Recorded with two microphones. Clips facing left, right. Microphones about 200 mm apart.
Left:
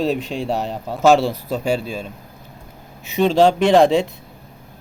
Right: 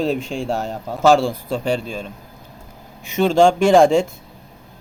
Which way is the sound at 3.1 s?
Centre (ahead or behind).